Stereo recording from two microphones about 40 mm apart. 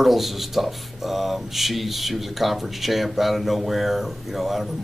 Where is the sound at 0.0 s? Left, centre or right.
Centre.